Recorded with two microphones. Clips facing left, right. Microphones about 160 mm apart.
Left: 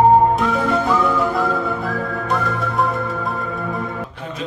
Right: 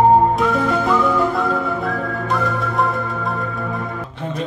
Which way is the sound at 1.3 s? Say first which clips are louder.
Even; centre (ahead or behind).